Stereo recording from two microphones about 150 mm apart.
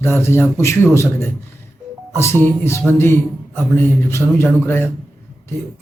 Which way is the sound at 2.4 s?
15° left (ahead or behind).